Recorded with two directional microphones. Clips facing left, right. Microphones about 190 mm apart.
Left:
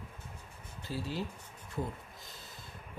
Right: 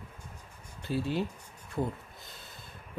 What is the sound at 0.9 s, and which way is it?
Speech, 60° right (ahead or behind).